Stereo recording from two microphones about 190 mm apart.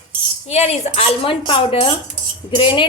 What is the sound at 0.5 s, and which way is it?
Speech, 35° left (ahead or behind).